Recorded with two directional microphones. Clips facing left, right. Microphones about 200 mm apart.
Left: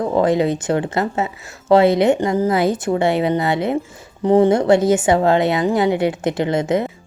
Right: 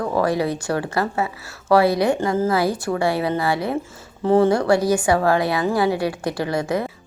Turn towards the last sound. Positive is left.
turn(degrees=20)  # may be behind; listen again after turning